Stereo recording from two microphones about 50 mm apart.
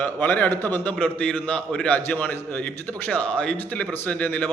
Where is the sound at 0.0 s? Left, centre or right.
Left.